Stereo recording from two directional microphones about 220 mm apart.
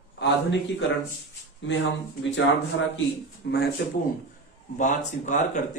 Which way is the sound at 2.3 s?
55° left (ahead or behind).